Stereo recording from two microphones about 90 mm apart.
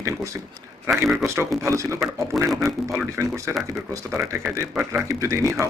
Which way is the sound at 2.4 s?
Centre (ahead or behind).